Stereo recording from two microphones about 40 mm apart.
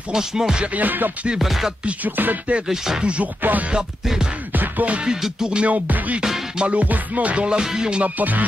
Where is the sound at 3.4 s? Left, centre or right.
Right.